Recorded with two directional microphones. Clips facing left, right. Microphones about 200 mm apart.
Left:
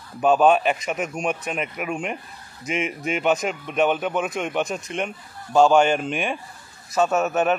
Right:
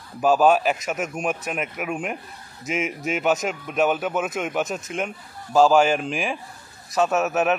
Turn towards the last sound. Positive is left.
turn(degrees=0)  # may be behind; listen again after turning